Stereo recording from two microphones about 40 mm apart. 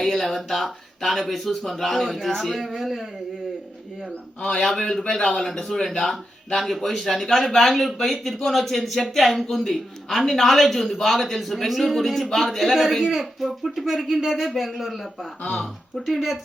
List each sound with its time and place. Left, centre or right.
0.0 s speech: centre
4.4 s a man's voice: left
4.8 s speech: centre
13.0 s speech: centre
13.4 s speech: centre